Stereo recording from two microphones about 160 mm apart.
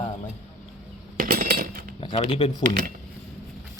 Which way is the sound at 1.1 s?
55° right (ahead or behind).